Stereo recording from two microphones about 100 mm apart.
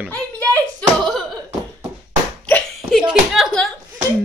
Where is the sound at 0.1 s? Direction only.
15° left (ahead or behind).